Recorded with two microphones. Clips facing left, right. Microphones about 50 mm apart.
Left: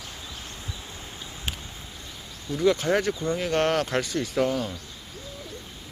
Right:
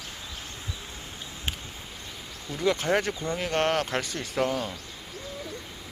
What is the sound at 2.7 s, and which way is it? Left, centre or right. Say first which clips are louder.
Speech: left 2 dB; right.